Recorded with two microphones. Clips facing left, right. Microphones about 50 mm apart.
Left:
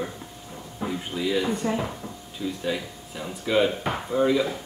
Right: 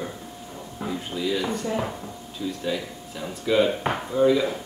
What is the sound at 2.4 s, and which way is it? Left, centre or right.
Speech, centre.